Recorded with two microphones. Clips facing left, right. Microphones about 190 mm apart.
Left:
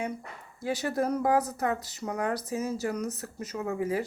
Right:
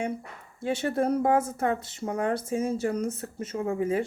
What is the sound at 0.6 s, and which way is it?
A woman's voice, 25° right (ahead or behind).